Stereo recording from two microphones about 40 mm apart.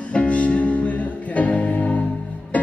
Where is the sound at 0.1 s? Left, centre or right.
Left.